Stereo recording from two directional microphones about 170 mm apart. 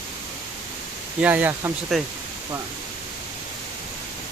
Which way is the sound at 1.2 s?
10° right (ahead or behind).